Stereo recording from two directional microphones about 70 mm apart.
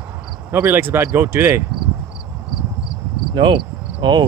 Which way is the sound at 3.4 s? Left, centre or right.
Right.